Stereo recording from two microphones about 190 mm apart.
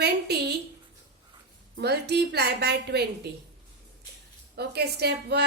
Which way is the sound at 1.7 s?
60° right (ahead or behind).